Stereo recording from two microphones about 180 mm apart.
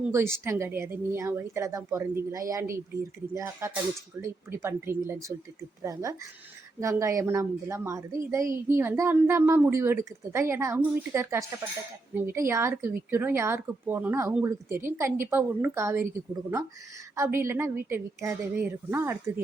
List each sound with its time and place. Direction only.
0.1 s a woman's voice: 15° right (ahead or behind)